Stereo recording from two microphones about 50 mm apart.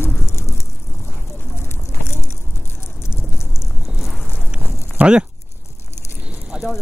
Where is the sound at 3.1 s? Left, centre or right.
Left.